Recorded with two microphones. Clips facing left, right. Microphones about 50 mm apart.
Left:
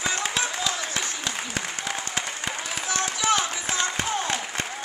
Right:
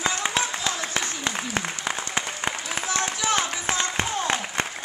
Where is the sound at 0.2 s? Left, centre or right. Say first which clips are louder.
Right 1 dB; right.